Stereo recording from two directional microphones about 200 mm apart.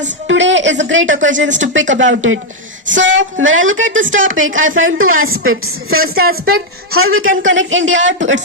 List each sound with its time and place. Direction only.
0.3 s a woman's voice: 65° right (ahead or behind)